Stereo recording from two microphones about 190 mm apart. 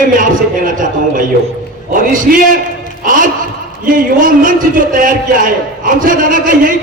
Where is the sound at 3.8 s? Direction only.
45° right (ahead or behind).